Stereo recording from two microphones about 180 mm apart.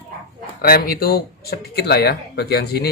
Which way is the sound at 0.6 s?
55° left (ahead or behind).